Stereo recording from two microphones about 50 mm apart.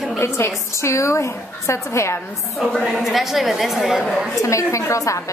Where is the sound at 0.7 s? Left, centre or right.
Left.